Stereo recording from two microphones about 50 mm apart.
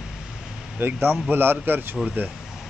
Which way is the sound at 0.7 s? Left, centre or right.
Right.